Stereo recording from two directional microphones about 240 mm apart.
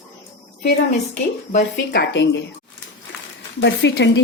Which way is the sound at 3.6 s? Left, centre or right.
Left.